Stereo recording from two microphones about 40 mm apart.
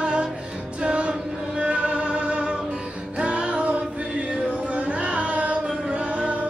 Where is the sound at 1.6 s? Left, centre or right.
Right.